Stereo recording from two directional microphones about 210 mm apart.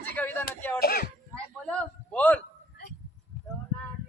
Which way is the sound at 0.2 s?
10° left (ahead or behind).